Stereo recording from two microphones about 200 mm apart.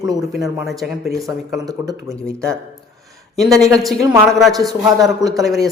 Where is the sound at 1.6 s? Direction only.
20° right (ahead or behind).